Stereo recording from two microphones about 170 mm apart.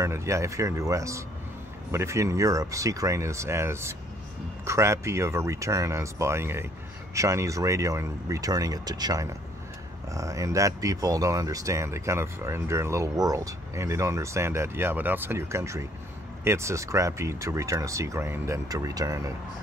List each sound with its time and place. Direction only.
0.0 s speech: 15° right (ahead or behind)